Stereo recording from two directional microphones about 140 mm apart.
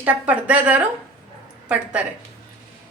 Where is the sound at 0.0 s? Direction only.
10° right (ahead or behind).